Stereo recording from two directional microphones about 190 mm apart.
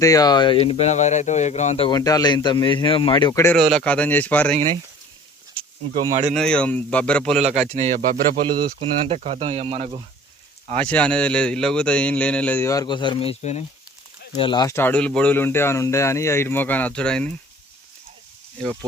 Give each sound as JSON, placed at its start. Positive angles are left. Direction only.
{"t": 0.0, "sound": "speech", "side_deg": 20}
{"t": 1.9, "sound": "speech", "side_deg": 20}
{"t": 3.8, "sound": "speech", "side_deg": 5}
{"t": 5.9, "sound": "speech", "side_deg": -35}
{"t": 6.3, "sound": "speech", "side_deg": 5}
{"t": 7.3, "sound": "speech", "side_deg": -35}
{"t": 8.4, "sound": "speech", "side_deg": -25}
{"t": 10.8, "sound": "speech", "side_deg": 5}
{"t": 14.3, "sound": "speech", "side_deg": 25}